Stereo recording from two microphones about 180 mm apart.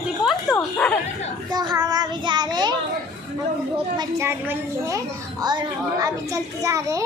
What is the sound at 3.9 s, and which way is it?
A woman's voice, 25° right (ahead or behind).